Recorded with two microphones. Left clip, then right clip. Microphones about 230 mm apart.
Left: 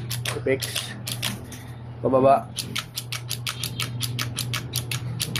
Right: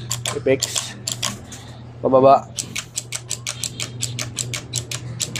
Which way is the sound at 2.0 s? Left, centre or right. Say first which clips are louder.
Right 5 dB; centre.